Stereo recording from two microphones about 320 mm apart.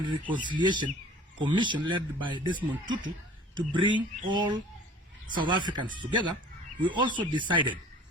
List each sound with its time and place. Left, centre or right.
0.0 s a man's voice: centre